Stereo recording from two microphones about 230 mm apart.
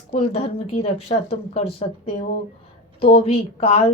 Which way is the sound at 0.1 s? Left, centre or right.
Left.